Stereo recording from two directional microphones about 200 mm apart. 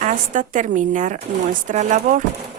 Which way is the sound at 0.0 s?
40° right (ahead or behind).